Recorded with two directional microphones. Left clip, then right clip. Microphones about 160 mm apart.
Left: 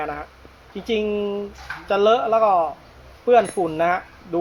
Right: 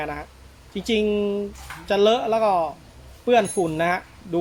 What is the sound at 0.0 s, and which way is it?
Speech, 20° right (ahead or behind).